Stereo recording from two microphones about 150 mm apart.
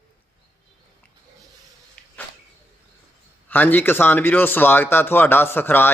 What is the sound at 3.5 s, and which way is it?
Speech, 10° left (ahead or behind).